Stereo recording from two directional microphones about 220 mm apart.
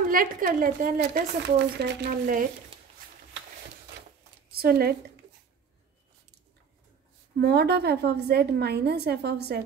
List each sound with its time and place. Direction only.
0.1 s a woman's voice: 40° right (ahead or behind)
4.5 s a woman's voice: 45° right (ahead or behind)
7.3 s a woman's voice: 45° right (ahead or behind)